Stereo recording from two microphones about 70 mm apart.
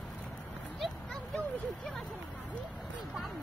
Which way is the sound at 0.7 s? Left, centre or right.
Centre.